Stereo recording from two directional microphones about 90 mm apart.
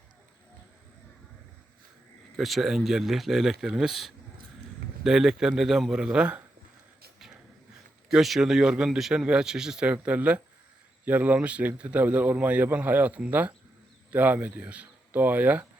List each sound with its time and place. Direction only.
2.3 s a man's voice: centre (ahead or behind)
8.1 s a man's voice: 5° right (ahead or behind)